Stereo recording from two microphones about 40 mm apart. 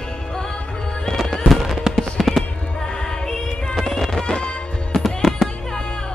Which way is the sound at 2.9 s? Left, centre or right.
Centre.